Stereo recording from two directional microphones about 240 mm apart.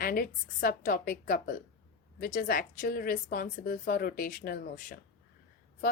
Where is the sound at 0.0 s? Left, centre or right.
Left.